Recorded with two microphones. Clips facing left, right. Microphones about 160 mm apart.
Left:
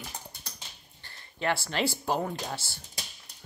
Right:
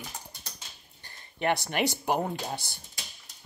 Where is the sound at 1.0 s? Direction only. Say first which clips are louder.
Right 2 dB; 20° right (ahead or behind).